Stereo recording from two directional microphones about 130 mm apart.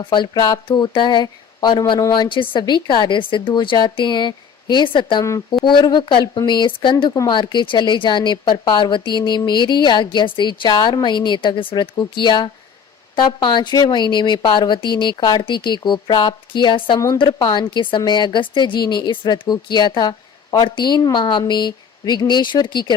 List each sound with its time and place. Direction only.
0.0 s a woman's voice: 35° left (ahead or behind)